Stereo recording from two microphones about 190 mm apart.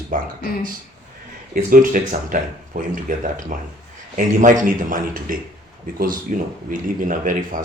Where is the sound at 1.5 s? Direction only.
50° right (ahead or behind).